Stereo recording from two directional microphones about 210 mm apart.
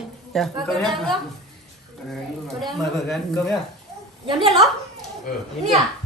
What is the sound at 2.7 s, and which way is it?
Speech, centre (ahead or behind).